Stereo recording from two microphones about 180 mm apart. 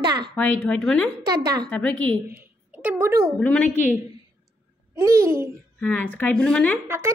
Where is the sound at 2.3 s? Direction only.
10° right (ahead or behind).